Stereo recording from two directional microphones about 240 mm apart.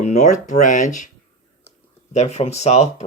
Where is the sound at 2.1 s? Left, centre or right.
Left.